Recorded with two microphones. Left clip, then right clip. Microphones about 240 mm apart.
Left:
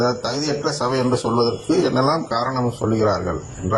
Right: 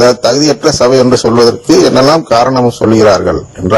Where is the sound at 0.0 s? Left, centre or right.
Right.